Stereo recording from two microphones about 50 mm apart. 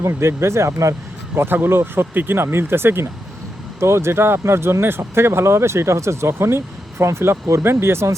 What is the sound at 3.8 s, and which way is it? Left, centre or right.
Speech, right.